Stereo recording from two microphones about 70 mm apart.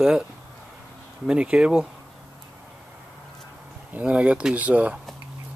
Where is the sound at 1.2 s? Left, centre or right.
Centre.